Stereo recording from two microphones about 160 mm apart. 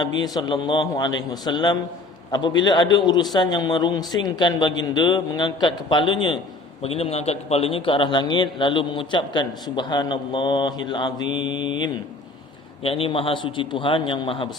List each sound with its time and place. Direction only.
0.0 s a man's voice: 25° left (ahead or behind)